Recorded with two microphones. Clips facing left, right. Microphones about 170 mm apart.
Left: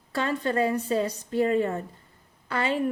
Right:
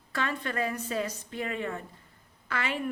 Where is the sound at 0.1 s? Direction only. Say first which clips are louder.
Left 6 dB; 35° left (ahead or behind).